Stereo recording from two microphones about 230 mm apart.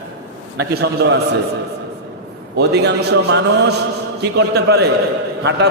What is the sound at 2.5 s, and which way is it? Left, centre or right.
A man's voice, right.